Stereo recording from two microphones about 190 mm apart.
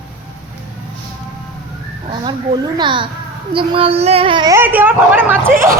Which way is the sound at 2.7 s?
25° right (ahead or behind).